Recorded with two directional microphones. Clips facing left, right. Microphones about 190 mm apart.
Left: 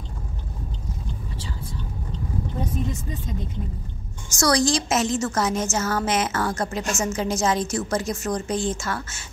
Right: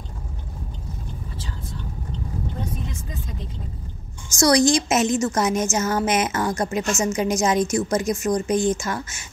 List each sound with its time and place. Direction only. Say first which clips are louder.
4.4 s a woman's voice: right 4 dB; 20° right (ahead or behind)